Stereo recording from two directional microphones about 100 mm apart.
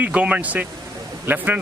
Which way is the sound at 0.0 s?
15° right (ahead or behind).